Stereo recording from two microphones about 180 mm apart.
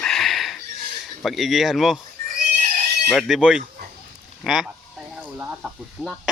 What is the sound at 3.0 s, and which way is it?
Speech, centre (ahead or behind).